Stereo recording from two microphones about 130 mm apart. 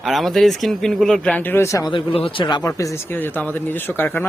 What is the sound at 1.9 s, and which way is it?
Speech, 45° left (ahead or behind).